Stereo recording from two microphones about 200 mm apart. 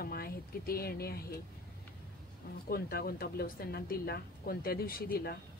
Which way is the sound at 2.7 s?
50° left (ahead or behind).